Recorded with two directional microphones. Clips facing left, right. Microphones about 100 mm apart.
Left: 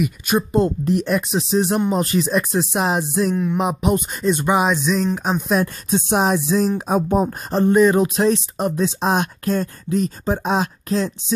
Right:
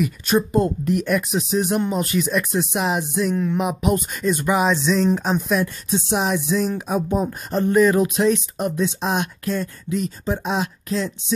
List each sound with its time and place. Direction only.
0.5 s speech: 25° left (ahead or behind)
5.5 s speech: 45° left (ahead or behind)
7.5 s speech: 25° left (ahead or behind)